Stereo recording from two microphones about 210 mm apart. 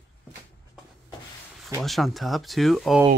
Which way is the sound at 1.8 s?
Centre (ahead or behind).